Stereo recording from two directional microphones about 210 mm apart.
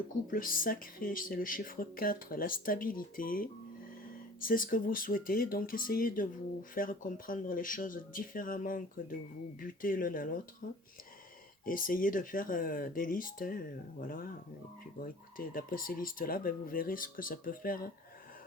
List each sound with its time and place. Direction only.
0.3 s speech: 40° left (ahead or behind)
11.6 s speech: 40° left (ahead or behind)